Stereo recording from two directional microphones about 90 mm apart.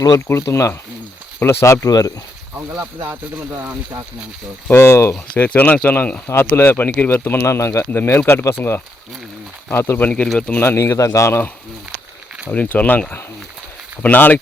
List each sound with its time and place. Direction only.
0.3 s a man's voice: 30° left (ahead or behind)
1.9 s speech: 45° left (ahead or behind)
2.8 s speech: 25° right (ahead or behind)
4.7 s speech: 30° left (ahead or behind)
5.5 s speech: 15° left (ahead or behind)
10.0 s speech: 15° left (ahead or behind)
10.6 s a man's voice: 25° left (ahead or behind)
12.5 s speech: 15° left (ahead or behind)